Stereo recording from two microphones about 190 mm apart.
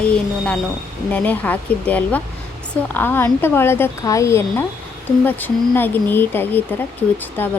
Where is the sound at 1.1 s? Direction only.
10° left (ahead or behind).